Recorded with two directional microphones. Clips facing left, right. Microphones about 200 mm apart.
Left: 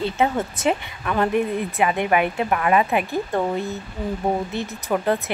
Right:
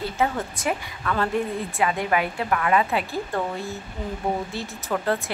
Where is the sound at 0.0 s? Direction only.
25° left (ahead or behind).